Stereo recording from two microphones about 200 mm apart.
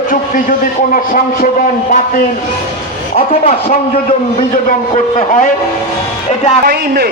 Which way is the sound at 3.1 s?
30° left (ahead or behind).